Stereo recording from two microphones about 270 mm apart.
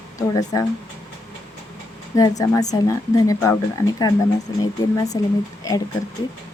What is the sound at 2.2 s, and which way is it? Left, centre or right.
A woman's voice, centre.